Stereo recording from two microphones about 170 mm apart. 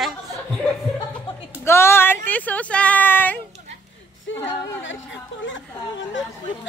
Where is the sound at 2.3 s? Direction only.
10° left (ahead or behind).